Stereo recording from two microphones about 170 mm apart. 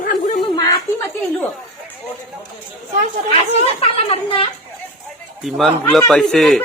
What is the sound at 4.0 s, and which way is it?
Speech, 30° left (ahead or behind).